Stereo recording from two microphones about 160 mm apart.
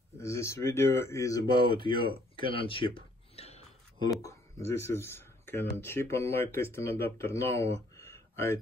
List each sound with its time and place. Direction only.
0.2 s speech: 15° left (ahead or behind); by 3.6 s 40° left (ahead or behind)
4.2 s speech: 20° left (ahead or behind)
8.0 s a sound: 15° left (ahead or behind)